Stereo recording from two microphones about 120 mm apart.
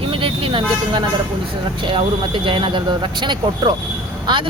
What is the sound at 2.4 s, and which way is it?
Speech, 45° right (ahead or behind).